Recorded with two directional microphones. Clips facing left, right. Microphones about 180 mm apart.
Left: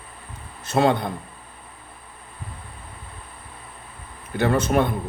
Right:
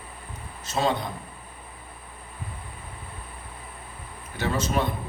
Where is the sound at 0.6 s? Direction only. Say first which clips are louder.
Left 6 dB; 60° left (ahead or behind).